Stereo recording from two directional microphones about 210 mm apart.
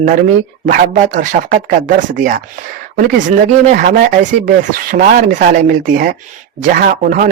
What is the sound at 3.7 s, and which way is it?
A man's voice, 40° right (ahead or behind).